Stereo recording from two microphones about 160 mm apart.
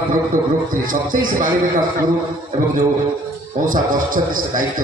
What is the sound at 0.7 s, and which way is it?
Speech, 60° right (ahead or behind).